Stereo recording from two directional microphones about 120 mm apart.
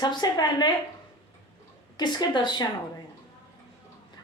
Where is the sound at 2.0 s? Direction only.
40° left (ahead or behind).